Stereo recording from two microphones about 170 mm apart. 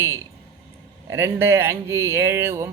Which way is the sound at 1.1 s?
15° right (ahead or behind).